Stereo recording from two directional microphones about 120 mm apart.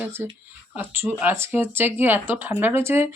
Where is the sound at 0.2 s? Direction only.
15° right (ahead or behind).